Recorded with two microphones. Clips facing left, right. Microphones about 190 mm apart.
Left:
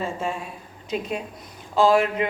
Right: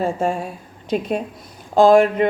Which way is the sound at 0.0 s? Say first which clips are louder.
Right 7 dB; 50° right (ahead or behind).